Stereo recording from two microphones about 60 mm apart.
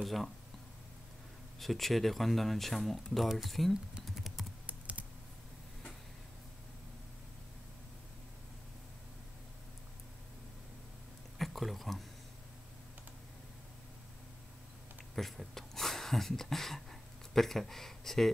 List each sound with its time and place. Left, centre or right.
0.0 s speech: centre
1.6 s speech: centre
4.0 s typing: centre
4.6 s computer keyboard: right
11.3 s a sound: centre
15.1 s speech: centre